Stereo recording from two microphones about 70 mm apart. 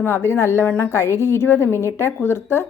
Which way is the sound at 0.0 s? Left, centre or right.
Left.